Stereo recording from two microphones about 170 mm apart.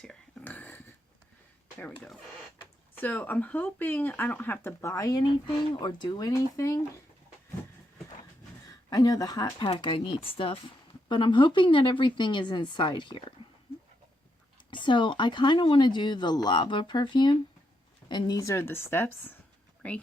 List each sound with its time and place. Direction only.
0.0 s a sound: 5° left (ahead or behind)
1.8 s speech: 5° left (ahead or behind)
8.9 s speech: 20° left (ahead or behind)
9.6 s speech: 35° left (ahead or behind)
14.7 s speech: 30° left (ahead or behind); by 20.0 s 10° left (ahead or behind)